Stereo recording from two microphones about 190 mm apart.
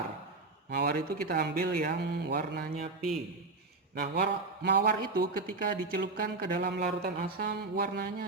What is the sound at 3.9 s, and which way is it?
Speech, 60° right (ahead or behind).